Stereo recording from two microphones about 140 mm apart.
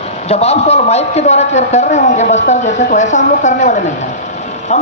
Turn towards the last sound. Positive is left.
turn(degrees=55)  # may be behind; listen again after turning